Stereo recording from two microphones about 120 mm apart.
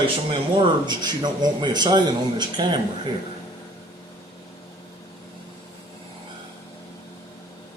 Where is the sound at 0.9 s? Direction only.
35° right (ahead or behind).